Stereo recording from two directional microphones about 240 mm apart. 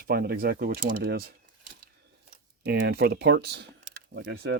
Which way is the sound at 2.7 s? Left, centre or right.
Right.